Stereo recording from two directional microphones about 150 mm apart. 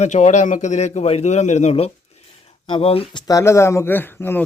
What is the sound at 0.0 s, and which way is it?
A man's voice, 50° left (ahead or behind).